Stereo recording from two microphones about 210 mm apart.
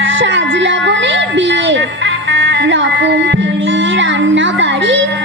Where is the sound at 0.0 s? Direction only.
65° right (ahead or behind).